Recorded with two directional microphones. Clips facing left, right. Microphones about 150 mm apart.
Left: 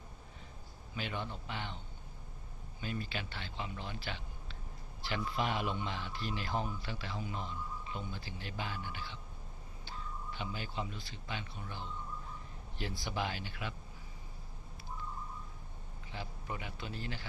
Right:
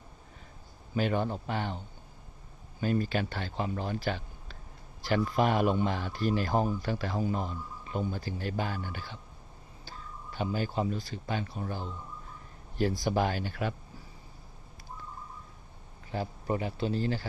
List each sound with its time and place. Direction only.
0.9 s speech: 45° right (ahead or behind)
2.8 s speech: 45° right (ahead or behind)
16.1 s a man's voice: 40° right (ahead or behind)